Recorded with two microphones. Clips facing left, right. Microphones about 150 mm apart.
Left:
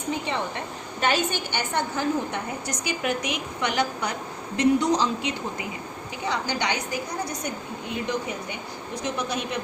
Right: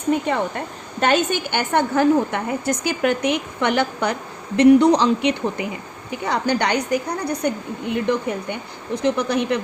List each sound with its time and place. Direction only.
0.1 s a woman's voice: 50° right (ahead or behind)